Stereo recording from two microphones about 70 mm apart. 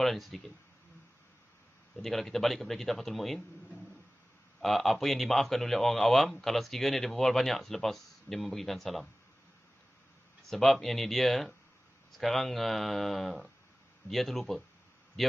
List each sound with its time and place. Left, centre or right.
0.0 s speech: centre
2.0 s speech: centre
4.6 s speech: centre
10.5 s speech: centre